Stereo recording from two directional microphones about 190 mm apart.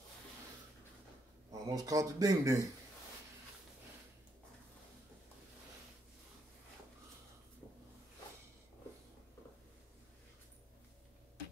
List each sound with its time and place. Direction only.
1.5 s speech: 20° right (ahead or behind)